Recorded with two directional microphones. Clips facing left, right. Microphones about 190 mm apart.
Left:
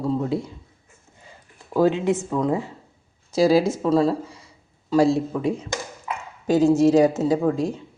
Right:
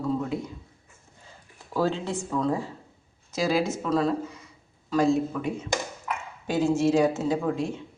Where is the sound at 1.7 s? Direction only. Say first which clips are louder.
Left 7 dB; 15° left (ahead or behind).